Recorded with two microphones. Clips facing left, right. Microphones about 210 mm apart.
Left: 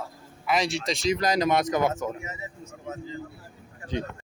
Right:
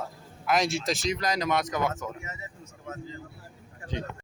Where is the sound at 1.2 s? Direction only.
35° left (ahead or behind).